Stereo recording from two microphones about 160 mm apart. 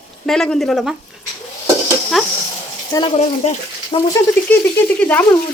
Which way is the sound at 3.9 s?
35° left (ahead or behind).